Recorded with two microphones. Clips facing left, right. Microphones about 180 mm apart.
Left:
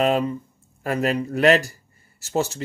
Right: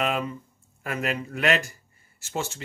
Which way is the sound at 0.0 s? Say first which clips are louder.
Left 7 dB; 35° left (ahead or behind).